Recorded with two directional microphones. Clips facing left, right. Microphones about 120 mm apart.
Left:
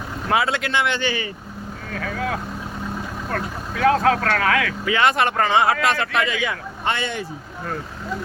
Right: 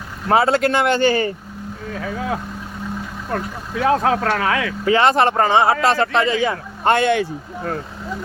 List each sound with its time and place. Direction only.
0.3 s speech: 35° right (ahead or behind)
3.3 s speech: 20° right (ahead or behind)
6.9 s speech: 65° right (ahead or behind)